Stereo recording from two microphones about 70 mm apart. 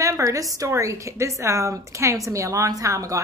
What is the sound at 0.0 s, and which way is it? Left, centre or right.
A woman's voice, right.